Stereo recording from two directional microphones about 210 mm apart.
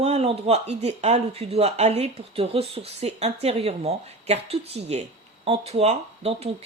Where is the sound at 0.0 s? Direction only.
30° right (ahead or behind).